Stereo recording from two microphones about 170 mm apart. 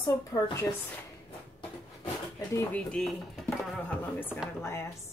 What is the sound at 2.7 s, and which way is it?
Speech, 5° left (ahead or behind).